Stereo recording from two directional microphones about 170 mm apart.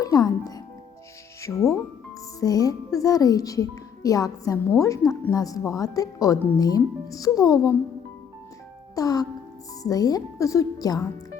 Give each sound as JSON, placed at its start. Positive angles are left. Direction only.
{"t": 0.0, "sound": "music", "side_deg": 20}
{"t": 1.4, "sound": "speech", "side_deg": 15}
{"t": 9.0, "sound": "speech", "side_deg": 20}